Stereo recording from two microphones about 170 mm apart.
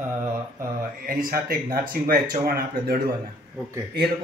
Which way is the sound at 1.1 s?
55° right (ahead or behind).